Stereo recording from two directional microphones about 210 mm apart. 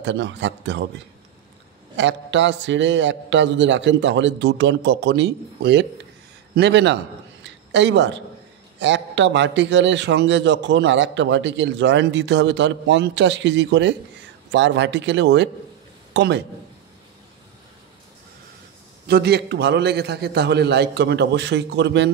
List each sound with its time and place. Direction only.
0.0 s a man's voice: 60° right (ahead or behind)
7.4 s a sound: 60° right (ahead or behind)
8.7 s a man's voice: 60° right (ahead or behind)
19.0 s a man's voice: 50° right (ahead or behind)